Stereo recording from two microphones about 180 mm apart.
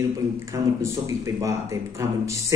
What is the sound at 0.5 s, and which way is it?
A man's voice, 15° right (ahead or behind).